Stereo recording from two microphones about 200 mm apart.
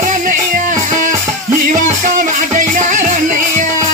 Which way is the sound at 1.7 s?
40° right (ahead or behind).